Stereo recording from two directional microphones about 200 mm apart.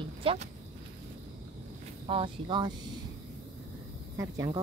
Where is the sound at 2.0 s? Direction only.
25° right (ahead or behind).